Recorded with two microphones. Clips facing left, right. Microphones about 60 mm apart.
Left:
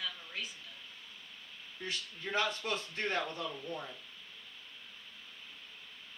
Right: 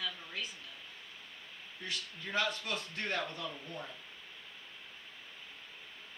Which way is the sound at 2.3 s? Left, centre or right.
Left.